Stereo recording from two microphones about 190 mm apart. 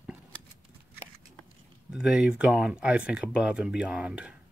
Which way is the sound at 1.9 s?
5° right (ahead or behind).